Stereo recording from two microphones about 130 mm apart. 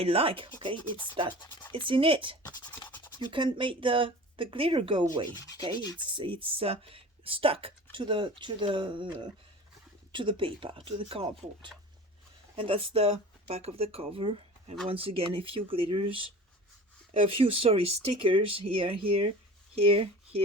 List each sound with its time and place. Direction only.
0.0 s speech: 45° right (ahead or behind)
17.3 s speech: 45° right (ahead or behind)